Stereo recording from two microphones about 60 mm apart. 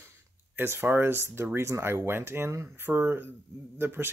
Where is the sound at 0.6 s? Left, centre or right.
Right.